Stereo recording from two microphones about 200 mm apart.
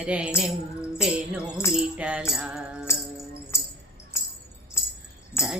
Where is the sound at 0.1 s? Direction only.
5° right (ahead or behind).